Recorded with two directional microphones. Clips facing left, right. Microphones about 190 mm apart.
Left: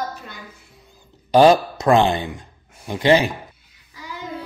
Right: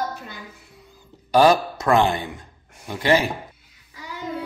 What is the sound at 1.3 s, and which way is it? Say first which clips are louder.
Speech: left 3 dB; 20° left (ahead or behind).